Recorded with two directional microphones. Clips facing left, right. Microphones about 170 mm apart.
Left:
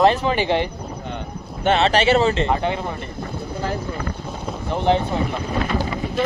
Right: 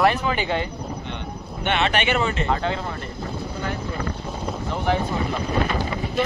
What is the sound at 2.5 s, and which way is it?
Speech, 15° left (ahead or behind).